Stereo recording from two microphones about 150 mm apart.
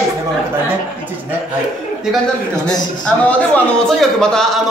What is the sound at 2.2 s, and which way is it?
A man's voice, 5° left (ahead or behind).